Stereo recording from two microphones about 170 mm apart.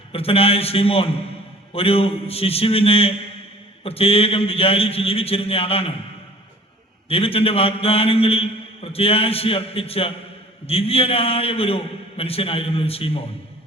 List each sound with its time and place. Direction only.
0.1 s a man's voice: 35° left (ahead or behind)
7.1 s a man's voice: 35° left (ahead or behind)